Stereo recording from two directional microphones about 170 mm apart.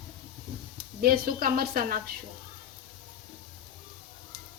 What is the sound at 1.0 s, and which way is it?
A woman's voice, 60° right (ahead or behind).